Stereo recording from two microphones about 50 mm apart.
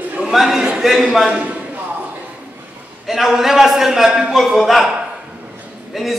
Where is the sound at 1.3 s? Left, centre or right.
Right.